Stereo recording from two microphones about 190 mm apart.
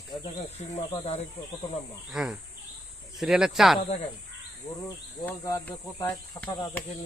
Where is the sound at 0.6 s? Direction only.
35° left (ahead or behind).